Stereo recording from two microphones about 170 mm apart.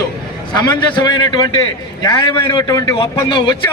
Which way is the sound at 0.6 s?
25° left (ahead or behind).